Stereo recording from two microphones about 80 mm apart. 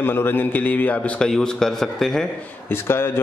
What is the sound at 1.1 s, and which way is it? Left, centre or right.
A man's voice, centre.